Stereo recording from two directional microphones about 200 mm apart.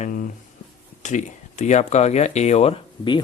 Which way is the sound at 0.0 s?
40° left (ahead or behind).